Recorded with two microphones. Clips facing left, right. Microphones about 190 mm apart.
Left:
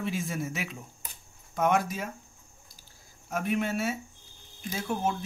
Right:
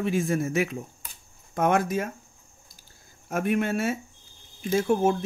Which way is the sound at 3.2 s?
55° right (ahead or behind).